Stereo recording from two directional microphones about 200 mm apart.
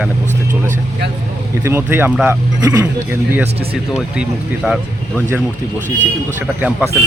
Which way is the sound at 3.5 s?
30° right (ahead or behind).